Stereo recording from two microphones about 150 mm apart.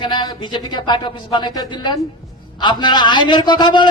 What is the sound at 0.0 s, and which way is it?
Speech, 30° left (ahead or behind).